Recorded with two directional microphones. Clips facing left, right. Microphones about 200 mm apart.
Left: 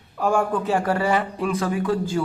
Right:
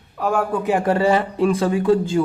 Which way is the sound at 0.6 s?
15° right (ahead or behind).